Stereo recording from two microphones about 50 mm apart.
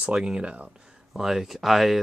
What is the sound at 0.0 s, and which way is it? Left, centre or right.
Speech, centre.